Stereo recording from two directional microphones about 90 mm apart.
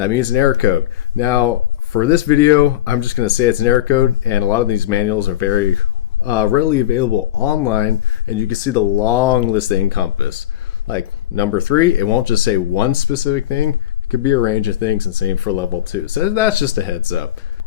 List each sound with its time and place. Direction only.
0.0 s speech: 30° left (ahead or behind)